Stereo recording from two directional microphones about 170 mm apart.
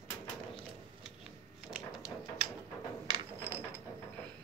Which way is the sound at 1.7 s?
5° right (ahead or behind).